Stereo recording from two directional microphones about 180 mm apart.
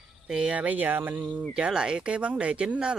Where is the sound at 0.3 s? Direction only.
5° right (ahead or behind).